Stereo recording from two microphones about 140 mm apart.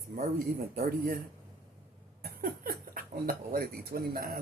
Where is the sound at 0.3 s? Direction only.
90° right.